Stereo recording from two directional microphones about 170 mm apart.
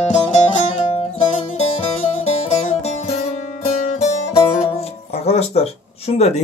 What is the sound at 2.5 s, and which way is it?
Music, 45° left (ahead or behind).